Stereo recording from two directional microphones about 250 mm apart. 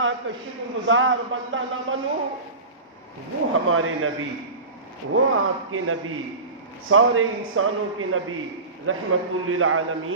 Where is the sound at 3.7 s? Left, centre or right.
Right.